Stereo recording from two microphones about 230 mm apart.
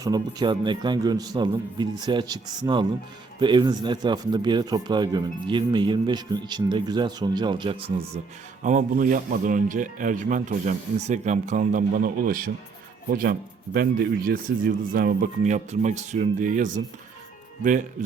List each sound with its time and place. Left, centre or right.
0.0 s speech: centre
8.6 s speech: right